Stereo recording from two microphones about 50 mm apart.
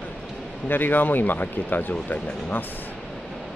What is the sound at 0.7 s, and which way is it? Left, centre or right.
Speech, left.